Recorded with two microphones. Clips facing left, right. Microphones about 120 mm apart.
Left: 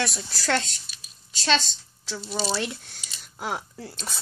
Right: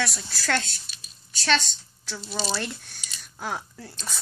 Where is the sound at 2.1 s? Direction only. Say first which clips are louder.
Left 2 dB; 10° left (ahead or behind).